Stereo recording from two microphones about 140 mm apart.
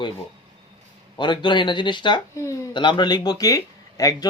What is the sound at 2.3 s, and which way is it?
Speech, 20° left (ahead or behind).